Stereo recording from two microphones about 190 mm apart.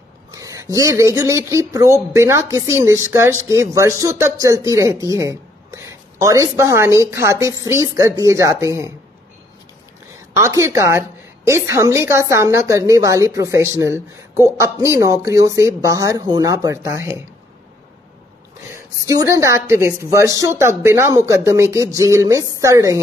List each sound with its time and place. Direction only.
0.3 s a woman's voice: 15° right (ahead or behind)
10.3 s a woman's voice: 15° right (ahead or behind)
18.7 s a woman's voice: 15° right (ahead or behind)